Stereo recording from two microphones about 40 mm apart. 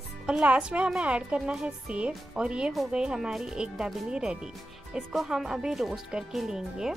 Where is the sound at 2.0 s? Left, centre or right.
Right.